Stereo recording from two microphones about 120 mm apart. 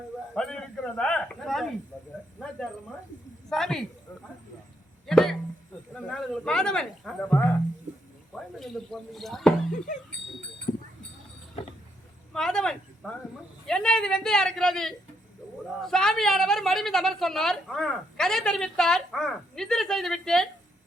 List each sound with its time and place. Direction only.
0.3 s a man's voice: 5° left (ahead or behind)
3.5 s a woman's voice: centre (ahead or behind)
5.0 s speech: 5° left (ahead or behind)
7.2 s speech: 15° left (ahead or behind)
8.4 s speech: centre (ahead or behind)
10.7 s sheep: 80° left
12.3 s a woman's voice: 5° left (ahead or behind)